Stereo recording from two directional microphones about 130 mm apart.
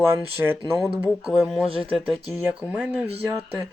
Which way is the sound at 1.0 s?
5° right (ahead or behind).